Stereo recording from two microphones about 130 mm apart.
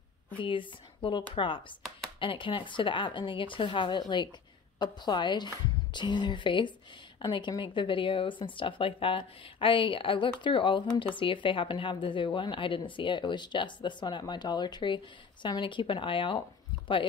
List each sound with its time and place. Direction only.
0.4 s a woman's voice: 40° left (ahead or behind)